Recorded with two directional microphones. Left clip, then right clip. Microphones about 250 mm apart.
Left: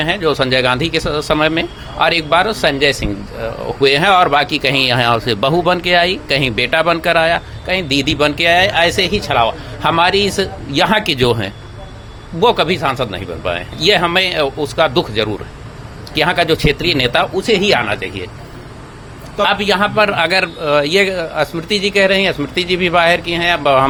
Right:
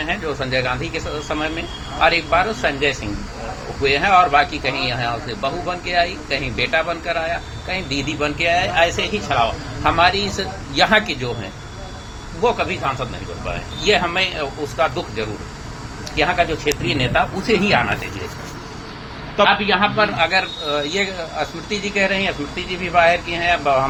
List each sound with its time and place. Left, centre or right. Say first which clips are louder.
0.0 s speech: left 8 dB; left
19.5 s speech: left 4 dB; left